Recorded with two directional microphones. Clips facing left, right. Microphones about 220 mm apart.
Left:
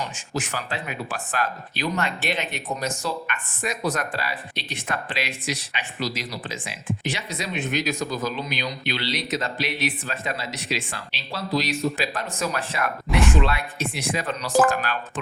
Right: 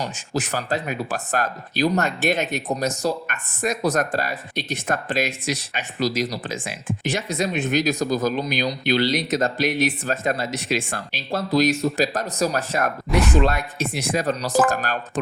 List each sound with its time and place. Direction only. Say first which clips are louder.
0.0 s speech: right 3 dB; 40° right (ahead or behind)